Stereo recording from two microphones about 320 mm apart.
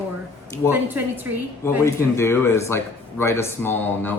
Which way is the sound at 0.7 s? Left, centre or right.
Centre.